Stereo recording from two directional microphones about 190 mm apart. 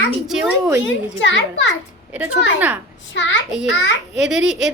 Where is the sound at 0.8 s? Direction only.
75° left (ahead or behind).